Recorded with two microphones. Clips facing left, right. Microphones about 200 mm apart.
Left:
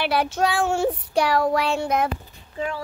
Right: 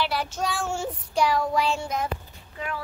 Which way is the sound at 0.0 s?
60° left (ahead or behind).